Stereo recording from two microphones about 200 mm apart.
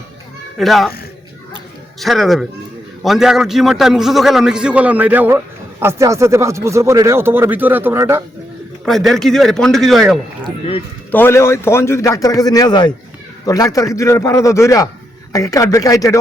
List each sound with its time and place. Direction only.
0.5 s a man's voice: centre (ahead or behind)
2.0 s a man's voice: centre (ahead or behind)
8.8 s a man's voice: centre (ahead or behind)
11.1 s a man's voice: 10° left (ahead or behind)